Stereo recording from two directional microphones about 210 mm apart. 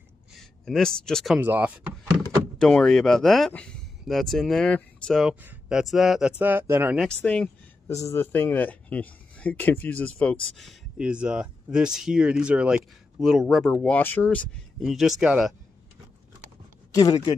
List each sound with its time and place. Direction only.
0.4 s speech: centre (ahead or behind)
2.6 s speech: 5° left (ahead or behind)
7.1 s speech: 5° left (ahead or behind)
16.9 s speech: 20° left (ahead or behind)